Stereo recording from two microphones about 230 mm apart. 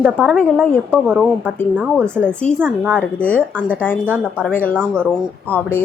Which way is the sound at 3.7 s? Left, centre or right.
Centre.